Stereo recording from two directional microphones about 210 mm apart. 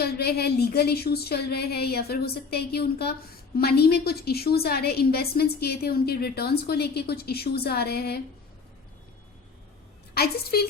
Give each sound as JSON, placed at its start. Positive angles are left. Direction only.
{"t": 0.0, "sound": "speech", "side_deg": 50}
{"t": 10.2, "sound": "speech", "side_deg": 50}